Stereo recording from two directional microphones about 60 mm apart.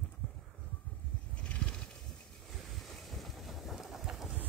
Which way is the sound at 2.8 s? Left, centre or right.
Centre.